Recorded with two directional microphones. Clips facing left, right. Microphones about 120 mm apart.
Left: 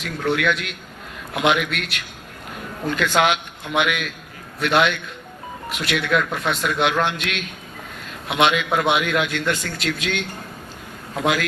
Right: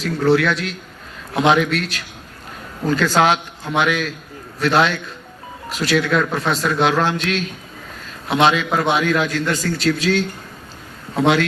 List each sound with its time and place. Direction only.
0.0 s a man's voice: 35° right (ahead or behind)